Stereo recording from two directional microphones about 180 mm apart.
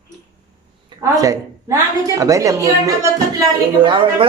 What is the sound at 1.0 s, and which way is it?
A woman's voice, 20° right (ahead or behind).